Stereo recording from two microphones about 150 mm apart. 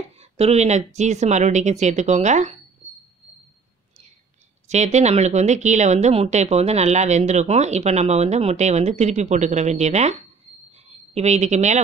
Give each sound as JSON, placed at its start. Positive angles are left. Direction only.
{"t": 0.2, "sound": "a woman's voice", "side_deg": -45}
{"t": 4.6, "sound": "a woman's voice", "side_deg": -50}
{"t": 11.1, "sound": "a woman's voice", "side_deg": -50}